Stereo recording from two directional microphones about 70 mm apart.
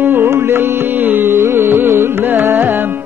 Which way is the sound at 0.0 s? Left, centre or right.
Right.